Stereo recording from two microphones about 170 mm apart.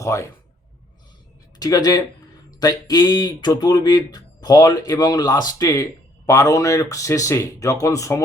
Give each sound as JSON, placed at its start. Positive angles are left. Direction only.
{"t": 0.0, "sound": "speech", "side_deg": 20}
{"t": 1.5, "sound": "speech", "side_deg": 25}